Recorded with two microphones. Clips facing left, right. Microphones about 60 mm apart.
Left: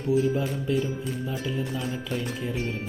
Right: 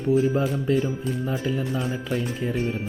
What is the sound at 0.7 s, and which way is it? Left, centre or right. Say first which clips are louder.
Speech: right 3 dB; right.